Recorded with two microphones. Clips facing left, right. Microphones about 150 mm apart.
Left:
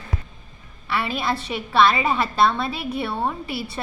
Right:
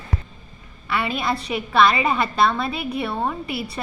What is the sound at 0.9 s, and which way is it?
A woman's voice, centre (ahead or behind).